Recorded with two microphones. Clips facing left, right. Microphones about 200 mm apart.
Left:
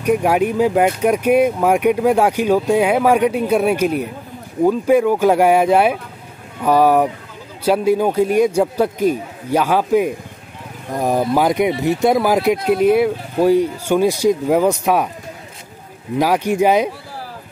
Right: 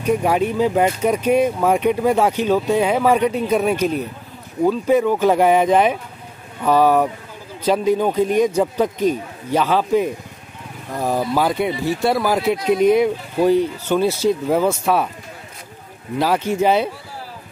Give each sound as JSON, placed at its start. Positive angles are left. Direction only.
{"t": 0.0, "sound": "speech", "side_deg": 10}
{"t": 12.6, "sound": "speech", "side_deg": 5}
{"t": 16.2, "sound": "speech", "side_deg": 15}